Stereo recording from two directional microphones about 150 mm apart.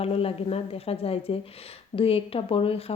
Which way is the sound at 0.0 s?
40° left (ahead or behind).